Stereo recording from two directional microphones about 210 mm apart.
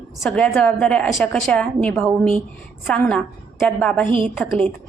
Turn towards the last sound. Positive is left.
turn(degrees=5)  # may be behind; listen again after turning